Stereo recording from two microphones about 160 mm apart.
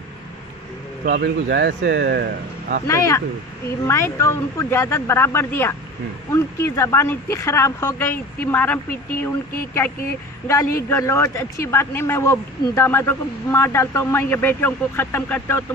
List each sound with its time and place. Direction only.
1.0 s speech: 85° right
2.9 s a man's voice: 20° left (ahead or behind)
10.5 s a man's voice: 20° left (ahead or behind)